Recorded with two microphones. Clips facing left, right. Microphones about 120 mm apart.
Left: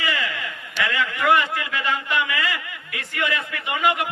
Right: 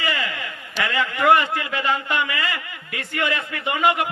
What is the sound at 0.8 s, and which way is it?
A man's voice, 35° right (ahead or behind).